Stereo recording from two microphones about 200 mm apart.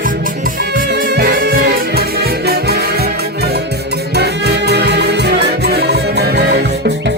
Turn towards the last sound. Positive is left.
turn(degrees=-55)  # may be behind; listen again after turning